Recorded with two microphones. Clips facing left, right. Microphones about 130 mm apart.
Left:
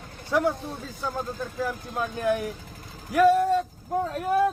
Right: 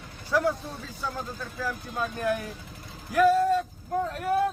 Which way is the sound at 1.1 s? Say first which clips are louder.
Left 5 dB; 25° left (ahead or behind).